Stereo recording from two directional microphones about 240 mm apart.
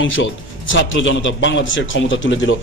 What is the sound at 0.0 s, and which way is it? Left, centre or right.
A man's voice, left.